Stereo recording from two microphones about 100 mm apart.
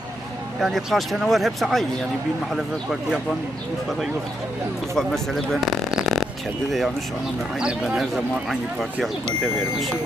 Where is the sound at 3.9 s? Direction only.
Centre (ahead or behind).